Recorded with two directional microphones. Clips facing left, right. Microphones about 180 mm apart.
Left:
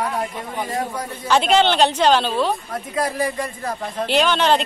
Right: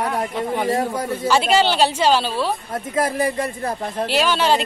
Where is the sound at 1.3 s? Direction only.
5° right (ahead or behind).